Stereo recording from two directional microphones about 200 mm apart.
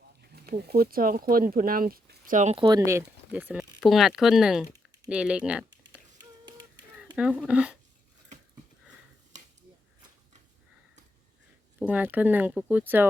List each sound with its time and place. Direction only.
0.2 s speech: 50° right (ahead or behind)
2.6 s speech: 20° right (ahead or behind)
7.2 s speech: 5° right (ahead or behind)
11.8 s speech: 10° right (ahead or behind)